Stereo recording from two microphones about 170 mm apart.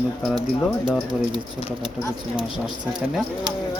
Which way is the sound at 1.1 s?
25° right (ahead or behind).